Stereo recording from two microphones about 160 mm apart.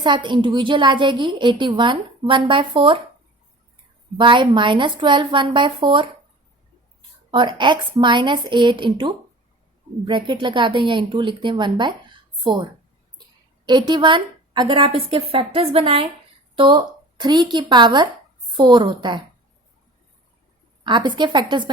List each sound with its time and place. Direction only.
0.0 s a woman's voice: 30° right (ahead or behind)
4.2 s a woman's voice: 30° right (ahead or behind)
7.3 s a woman's voice: 30° right (ahead or behind)
13.7 s a woman's voice: 30° right (ahead or behind)
20.8 s a woman's voice: 30° right (ahead or behind)